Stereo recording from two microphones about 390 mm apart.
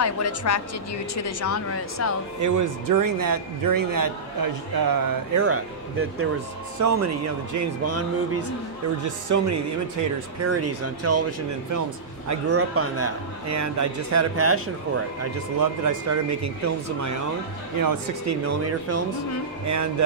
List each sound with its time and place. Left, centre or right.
0.0 s speech: left
2.4 s a man's voice: right
5.4 s a man's voice: right
15.6 s a man's voice: right